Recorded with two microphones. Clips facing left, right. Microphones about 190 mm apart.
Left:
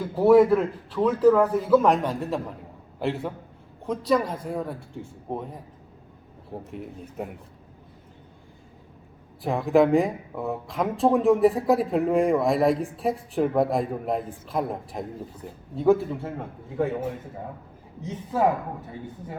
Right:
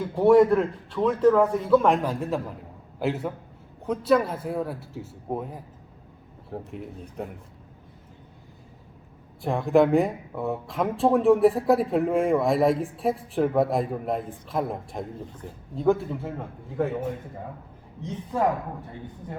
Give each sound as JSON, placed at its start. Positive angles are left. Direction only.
{"t": 0.0, "sound": "speech", "side_deg": 0}
{"t": 9.4, "sound": "speech", "side_deg": 0}